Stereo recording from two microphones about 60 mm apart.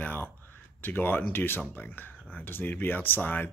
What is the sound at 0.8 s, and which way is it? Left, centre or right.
Speech, left.